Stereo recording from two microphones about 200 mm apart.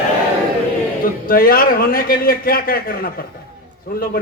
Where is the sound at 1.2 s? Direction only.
45° left (ahead or behind).